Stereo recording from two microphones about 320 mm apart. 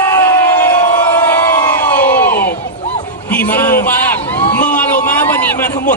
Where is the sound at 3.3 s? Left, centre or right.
Centre.